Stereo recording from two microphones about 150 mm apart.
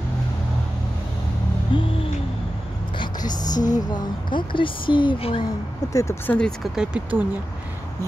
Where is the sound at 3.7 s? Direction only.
30° left (ahead or behind).